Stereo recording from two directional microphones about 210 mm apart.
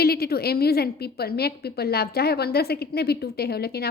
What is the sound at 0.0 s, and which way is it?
A woman's voice, 45° left (ahead or behind).